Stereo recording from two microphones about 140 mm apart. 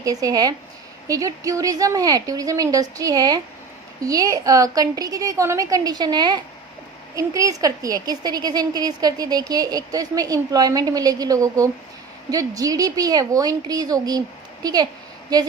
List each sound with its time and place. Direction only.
0.0 s a woman's voice: 25° right (ahead or behind)